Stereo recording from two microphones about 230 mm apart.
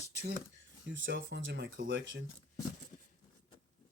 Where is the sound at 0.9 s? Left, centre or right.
Right.